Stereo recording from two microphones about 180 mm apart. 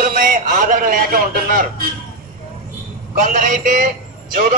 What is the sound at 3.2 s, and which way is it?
Speech, 45° right (ahead or behind).